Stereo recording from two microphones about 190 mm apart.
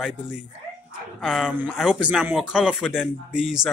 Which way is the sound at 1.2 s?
Centre (ahead or behind).